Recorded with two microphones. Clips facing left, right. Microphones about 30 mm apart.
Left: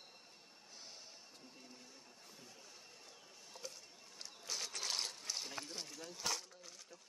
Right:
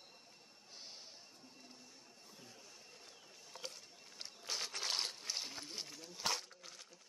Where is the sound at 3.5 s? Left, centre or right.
Right.